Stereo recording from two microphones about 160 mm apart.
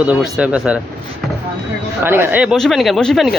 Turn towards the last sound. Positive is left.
turn(degrees=0)  # may be behind; listen again after turning